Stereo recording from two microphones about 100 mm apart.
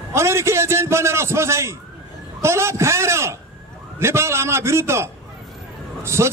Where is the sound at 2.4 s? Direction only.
25° right (ahead or behind).